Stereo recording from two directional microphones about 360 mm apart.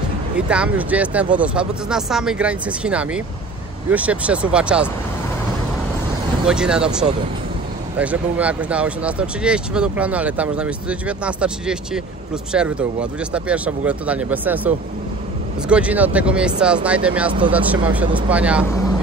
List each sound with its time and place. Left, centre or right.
0.5 s speech: centre
6.4 s speech: centre
15.7 s speech: centre